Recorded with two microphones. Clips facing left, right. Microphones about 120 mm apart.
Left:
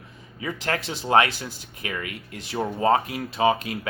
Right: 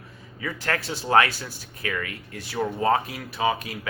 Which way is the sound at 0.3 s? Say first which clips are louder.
Left 1 dB; 25° left (ahead or behind).